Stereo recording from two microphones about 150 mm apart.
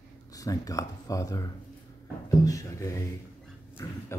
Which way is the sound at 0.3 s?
25° left (ahead or behind).